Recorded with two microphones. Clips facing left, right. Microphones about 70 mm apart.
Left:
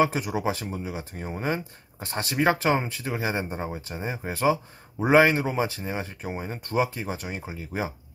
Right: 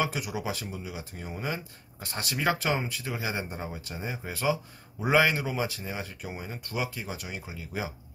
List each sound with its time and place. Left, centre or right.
0.0 s speech: left